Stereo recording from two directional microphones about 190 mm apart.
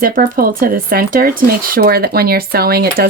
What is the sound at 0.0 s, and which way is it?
Speech, 50° right (ahead or behind).